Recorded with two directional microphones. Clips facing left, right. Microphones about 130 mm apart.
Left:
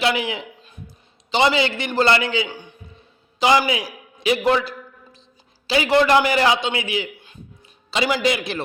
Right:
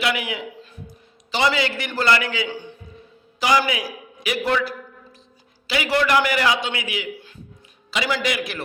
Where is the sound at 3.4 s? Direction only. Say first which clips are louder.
Left 3 dB; 25° left (ahead or behind).